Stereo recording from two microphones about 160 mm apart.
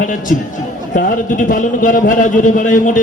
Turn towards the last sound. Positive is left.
turn(degrees=55)  # may be behind; listen again after turning